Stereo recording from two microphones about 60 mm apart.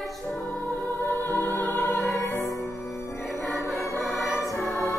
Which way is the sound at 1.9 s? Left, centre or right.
Left.